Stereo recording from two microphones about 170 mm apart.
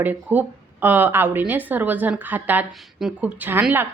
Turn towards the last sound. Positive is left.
turn(degrees=-10)  # may be behind; listen again after turning